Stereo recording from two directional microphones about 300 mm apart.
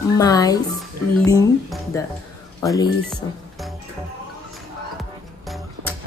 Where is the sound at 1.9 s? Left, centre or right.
Centre.